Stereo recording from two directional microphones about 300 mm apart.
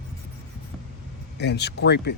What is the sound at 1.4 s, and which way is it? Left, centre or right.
Speech, left.